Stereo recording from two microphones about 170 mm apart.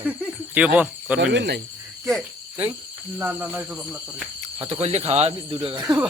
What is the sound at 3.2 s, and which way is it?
Cricket, 10° right (ahead or behind).